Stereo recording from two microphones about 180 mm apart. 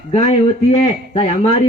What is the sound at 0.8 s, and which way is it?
Speech, 35° left (ahead or behind).